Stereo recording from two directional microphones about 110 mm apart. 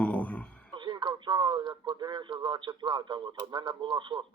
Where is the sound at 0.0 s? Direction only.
15° left (ahead or behind).